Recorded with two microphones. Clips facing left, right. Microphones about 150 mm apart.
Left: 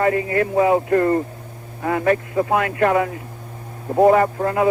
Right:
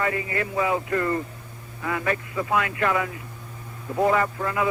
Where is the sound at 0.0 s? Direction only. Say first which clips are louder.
Left 8 dB; 40° left (ahead or behind).